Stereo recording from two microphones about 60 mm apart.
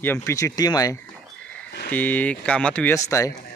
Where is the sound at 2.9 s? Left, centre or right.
Left.